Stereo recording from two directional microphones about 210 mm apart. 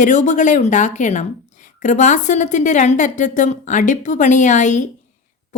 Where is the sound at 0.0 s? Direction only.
35° left (ahead or behind).